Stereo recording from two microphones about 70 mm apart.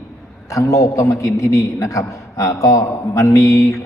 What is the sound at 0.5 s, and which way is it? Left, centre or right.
A man's voice, left.